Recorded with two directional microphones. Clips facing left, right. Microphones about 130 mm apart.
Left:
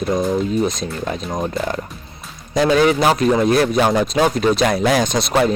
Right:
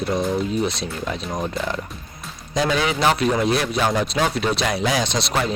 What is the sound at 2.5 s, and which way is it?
Speech, 45° left (ahead or behind).